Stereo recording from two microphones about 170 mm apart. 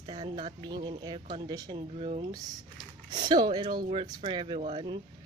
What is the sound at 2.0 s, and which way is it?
Speech, 35° right (ahead or behind).